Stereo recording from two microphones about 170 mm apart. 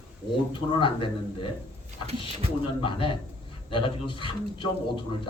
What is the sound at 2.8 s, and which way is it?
Speech, 30° left (ahead or behind).